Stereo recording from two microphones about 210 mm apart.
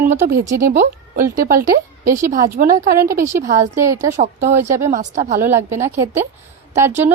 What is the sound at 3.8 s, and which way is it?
A woman's voice, 15° right (ahead or behind).